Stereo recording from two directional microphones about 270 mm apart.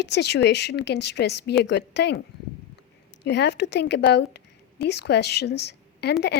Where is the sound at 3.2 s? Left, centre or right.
Left.